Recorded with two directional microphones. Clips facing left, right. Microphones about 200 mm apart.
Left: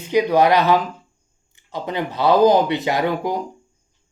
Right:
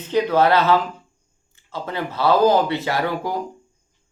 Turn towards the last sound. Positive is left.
turn(degrees=20)  # may be behind; listen again after turning